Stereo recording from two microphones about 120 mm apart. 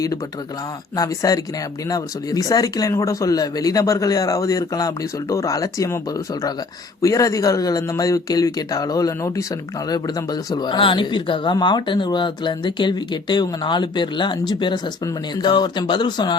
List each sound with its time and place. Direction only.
0.9 s speech: 30° left (ahead or behind)
7.0 s speech: 25° left (ahead or behind)